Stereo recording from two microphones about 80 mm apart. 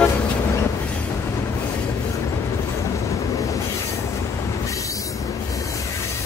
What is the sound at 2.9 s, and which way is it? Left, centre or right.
Train, left.